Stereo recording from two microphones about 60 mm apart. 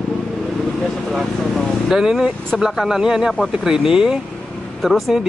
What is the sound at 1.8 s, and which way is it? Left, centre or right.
Speech, centre.